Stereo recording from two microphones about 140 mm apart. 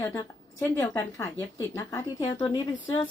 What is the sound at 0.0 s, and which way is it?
A woman's voice, 25° left (ahead or behind).